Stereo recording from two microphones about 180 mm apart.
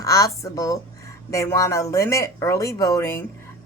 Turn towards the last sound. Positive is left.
turn(degrees=15)  # may be behind; listen again after turning